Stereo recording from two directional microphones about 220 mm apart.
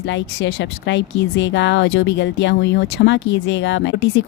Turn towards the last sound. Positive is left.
turn(degrees=55)  # may be behind; listen again after turning